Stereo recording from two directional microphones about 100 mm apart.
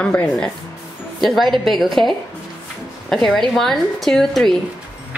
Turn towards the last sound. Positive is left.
turn(degrees=0)  # may be behind; listen again after turning